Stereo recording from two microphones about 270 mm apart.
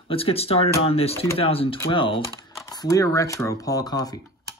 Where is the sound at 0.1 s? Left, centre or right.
Left.